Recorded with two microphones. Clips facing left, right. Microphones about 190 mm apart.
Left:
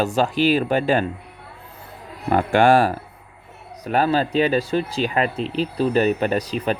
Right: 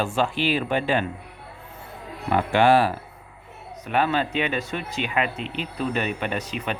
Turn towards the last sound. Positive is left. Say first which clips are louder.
# left 6 dB
turn(degrees=35)  # may be behind; listen again after turning